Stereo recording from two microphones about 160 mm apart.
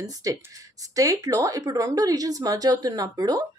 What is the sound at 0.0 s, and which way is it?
Speech, 20° right (ahead or behind).